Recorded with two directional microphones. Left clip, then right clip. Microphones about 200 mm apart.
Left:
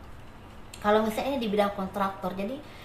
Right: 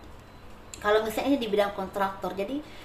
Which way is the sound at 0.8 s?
35° right (ahead or behind).